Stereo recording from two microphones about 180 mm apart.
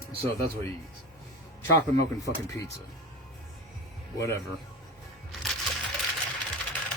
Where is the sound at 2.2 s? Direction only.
15° left (ahead or behind).